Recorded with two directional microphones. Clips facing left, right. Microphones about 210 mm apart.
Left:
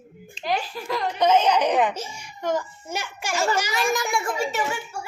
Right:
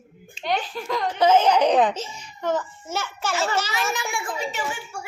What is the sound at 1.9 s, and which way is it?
A child's voice, 10° left (ahead or behind).